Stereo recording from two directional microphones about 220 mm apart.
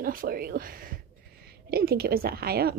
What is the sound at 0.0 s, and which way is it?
A woman's voice, 40° right (ahead or behind).